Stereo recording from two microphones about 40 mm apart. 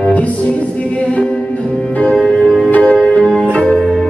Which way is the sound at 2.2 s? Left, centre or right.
Centre.